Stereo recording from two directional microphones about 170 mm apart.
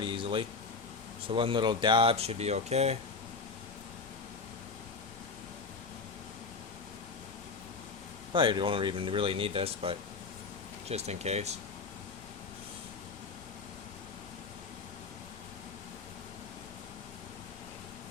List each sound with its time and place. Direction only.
0.0 s a sound: 30° right (ahead or behind)
1.3 s speech: 30° right (ahead or behind)
8.3 s speech: 30° right (ahead or behind)